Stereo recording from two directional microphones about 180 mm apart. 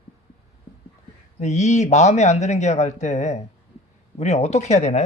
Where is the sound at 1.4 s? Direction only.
40° left (ahead or behind).